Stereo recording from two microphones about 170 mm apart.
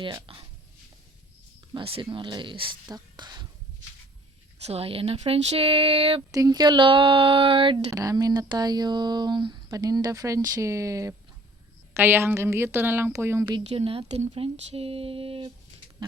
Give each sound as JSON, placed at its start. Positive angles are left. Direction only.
{"t": 0.0, "sound": "speech", "side_deg": -30}
{"t": 1.7, "sound": "speech", "side_deg": -30}
{"t": 4.6, "sound": "speech", "side_deg": -35}
{"t": 6.3, "sound": "speech", "side_deg": -20}
{"t": 7.9, "sound": "a woman's voice", "side_deg": -20}
{"t": 13.7, "sound": "speech", "side_deg": -35}